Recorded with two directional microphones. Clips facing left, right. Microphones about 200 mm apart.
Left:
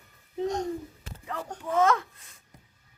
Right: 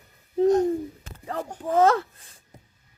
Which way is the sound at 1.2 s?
35° right (ahead or behind).